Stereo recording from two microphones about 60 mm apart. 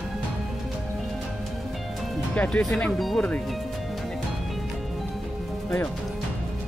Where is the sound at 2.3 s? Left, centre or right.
Left.